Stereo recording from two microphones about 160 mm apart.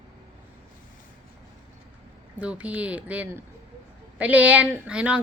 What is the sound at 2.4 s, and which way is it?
A woman's voice, 10° right (ahead or behind).